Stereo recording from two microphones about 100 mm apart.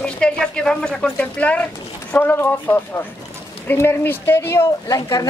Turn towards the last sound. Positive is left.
turn(degrees=35)  # may be behind; listen again after turning